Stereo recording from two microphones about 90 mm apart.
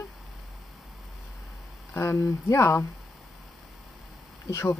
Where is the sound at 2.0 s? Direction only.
30° left (ahead or behind).